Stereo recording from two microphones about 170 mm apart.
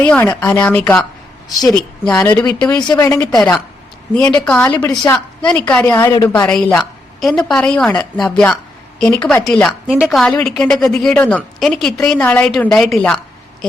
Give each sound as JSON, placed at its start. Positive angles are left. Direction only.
{"t": 0.0, "sound": "a woman's voice", "side_deg": 10}
{"t": 2.9, "sound": "a woman's voice", "side_deg": 20}
{"t": 3.2, "sound": "a woman's voice", "side_deg": 5}